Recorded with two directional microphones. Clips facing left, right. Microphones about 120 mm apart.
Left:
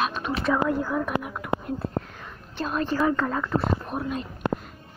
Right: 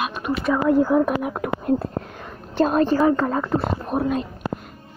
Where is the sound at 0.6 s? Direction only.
25° right (ahead or behind).